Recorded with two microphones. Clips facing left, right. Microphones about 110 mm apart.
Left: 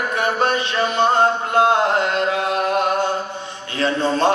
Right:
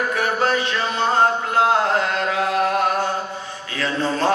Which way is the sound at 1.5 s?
25° left (ahead or behind).